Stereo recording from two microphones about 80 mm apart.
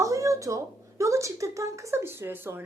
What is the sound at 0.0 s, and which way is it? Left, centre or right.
Speech, right.